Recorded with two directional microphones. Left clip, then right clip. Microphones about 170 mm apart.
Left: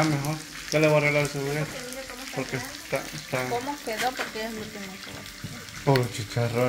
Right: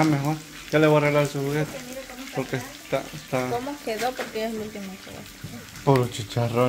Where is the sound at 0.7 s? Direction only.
30° right (ahead or behind).